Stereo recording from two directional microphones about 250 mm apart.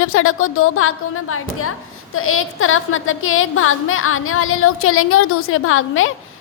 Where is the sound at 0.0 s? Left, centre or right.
Left.